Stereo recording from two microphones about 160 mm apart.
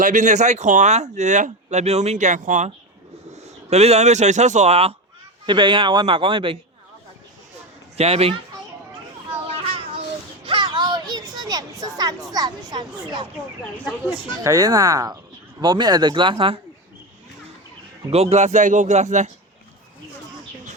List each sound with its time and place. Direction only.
0.0 s speech: 50° right (ahead or behind)
5.5 s speech: 30° right (ahead or behind)
7.9 s speech: 40° right (ahead or behind)
10.4 s a sound: 30° right (ahead or behind)
12.3 s speech: 25° right (ahead or behind)
14.4 s speech: 20° right (ahead or behind)
18.1 s speech: 40° right (ahead or behind)